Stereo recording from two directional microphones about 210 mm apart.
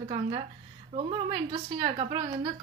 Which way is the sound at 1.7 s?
25° right (ahead or behind).